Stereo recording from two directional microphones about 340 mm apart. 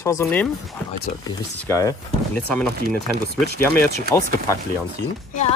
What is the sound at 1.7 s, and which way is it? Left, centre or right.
Speech, centre.